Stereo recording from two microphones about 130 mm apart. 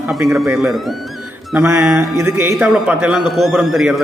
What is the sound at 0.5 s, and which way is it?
Speech, centre (ahead or behind).